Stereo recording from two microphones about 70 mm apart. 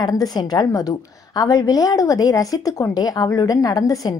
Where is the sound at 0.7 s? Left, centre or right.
Left.